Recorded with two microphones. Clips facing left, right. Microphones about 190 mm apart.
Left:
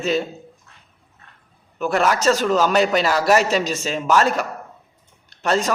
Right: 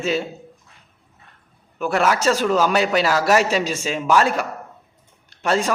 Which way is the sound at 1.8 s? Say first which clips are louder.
Left 1 dB; 10° right (ahead or behind).